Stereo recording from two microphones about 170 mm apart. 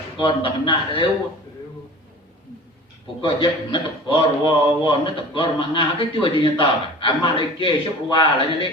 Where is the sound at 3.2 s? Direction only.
30° left (ahead or behind).